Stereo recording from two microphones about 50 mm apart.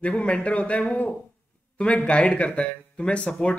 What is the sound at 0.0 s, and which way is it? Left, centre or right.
A man's voice, left.